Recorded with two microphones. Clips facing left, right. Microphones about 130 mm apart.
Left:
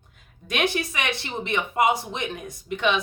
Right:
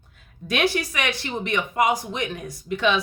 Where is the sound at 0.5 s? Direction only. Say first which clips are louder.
Right 2 dB; 20° left (ahead or behind).